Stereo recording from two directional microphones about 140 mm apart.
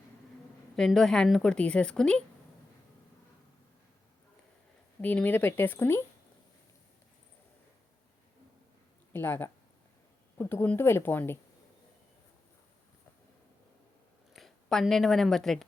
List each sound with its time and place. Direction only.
0.8 s a woman's voice: 5° left (ahead or behind)
4.9 s speech: 10° left (ahead or behind)
9.1 s speech: 15° left (ahead or behind)
14.3 s speech: centre (ahead or behind)